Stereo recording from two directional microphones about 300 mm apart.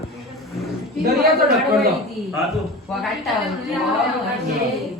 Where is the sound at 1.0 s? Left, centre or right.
Right.